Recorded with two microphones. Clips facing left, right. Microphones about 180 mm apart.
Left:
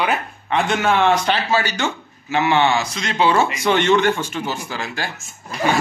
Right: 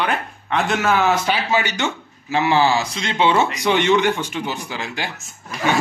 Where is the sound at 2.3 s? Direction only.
30° right (ahead or behind); by 4.8 s 15° right (ahead or behind).